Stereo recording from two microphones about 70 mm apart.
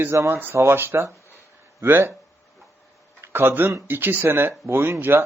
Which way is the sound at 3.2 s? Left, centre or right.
Right.